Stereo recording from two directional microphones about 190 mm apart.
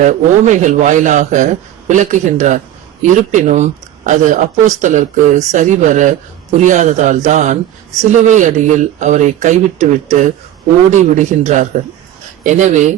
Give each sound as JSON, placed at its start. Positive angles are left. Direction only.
{"t": 0.0, "sound": "speech", "side_deg": -40}